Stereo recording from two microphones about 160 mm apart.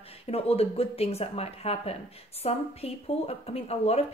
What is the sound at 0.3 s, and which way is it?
A woman's voice, 40° left (ahead or behind).